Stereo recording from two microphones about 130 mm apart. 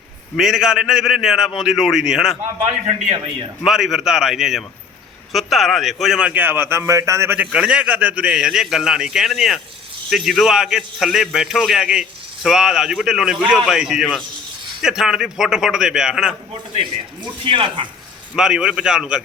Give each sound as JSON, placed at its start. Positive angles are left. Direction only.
{"t": 0.3, "sound": "a man's voice", "side_deg": 0}
{"t": 3.6, "sound": "a man's voice", "side_deg": -5}
{"t": 7.3, "sound": "a man's voice", "side_deg": -10}
{"t": 17.4, "sound": "speech", "side_deg": -40}
{"t": 18.3, "sound": "a man's voice", "side_deg": -5}